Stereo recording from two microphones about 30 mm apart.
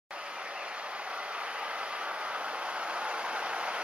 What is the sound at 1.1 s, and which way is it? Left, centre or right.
Vehicle, right.